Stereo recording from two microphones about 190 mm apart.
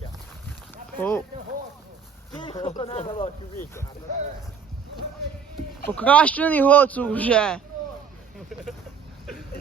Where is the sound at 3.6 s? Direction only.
15° left (ahead or behind).